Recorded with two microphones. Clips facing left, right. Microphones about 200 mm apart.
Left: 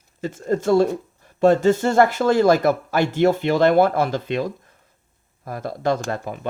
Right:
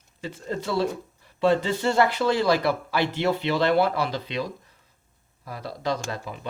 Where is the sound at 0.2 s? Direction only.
45° left (ahead or behind).